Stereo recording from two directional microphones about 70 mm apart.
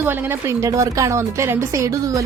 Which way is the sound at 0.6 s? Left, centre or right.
Right.